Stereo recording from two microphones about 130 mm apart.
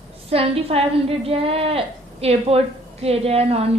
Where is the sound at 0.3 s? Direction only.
50° right (ahead or behind).